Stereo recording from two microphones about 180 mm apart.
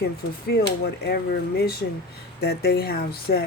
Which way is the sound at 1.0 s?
60° left (ahead or behind).